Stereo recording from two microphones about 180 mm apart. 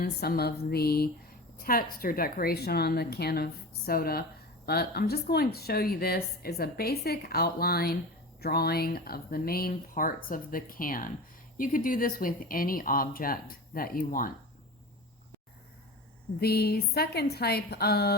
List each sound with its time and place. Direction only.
0.0 s speech: 60° left (ahead or behind)
16.4 s speech: 60° left (ahead or behind)